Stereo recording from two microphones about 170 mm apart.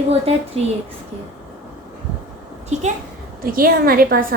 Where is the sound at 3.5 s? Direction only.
60° right (ahead or behind).